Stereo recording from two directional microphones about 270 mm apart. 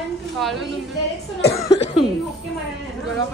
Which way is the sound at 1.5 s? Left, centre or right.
Centre.